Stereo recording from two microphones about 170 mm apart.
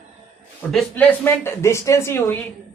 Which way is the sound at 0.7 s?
5° left (ahead or behind).